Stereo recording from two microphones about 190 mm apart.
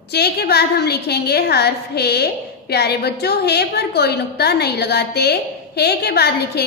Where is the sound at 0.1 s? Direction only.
60° left (ahead or behind).